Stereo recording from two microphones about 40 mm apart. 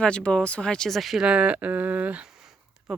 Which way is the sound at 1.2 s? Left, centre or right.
Right.